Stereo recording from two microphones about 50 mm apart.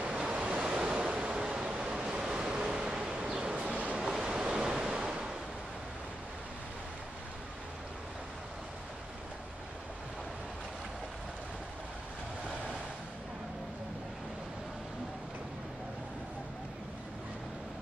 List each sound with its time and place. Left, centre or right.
0.0 s waves: centre
1.5 s a sound: right
3.9 s waves: centre